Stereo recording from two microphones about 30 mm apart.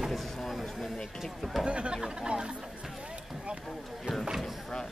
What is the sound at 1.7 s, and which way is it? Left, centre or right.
Speech, right.